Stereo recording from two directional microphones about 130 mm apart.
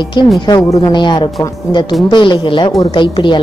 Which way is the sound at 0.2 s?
35° left (ahead or behind).